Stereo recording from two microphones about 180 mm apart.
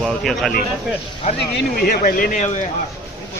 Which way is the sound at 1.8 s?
50° left (ahead or behind).